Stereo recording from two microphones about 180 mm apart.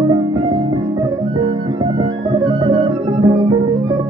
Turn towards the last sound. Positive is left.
turn(degrees=-25)  # may be behind; listen again after turning